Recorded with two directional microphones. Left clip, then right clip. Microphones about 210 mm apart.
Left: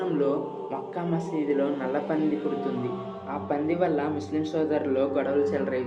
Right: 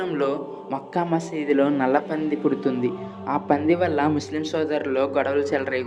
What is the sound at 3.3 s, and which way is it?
A man's voice, 45° right (ahead or behind).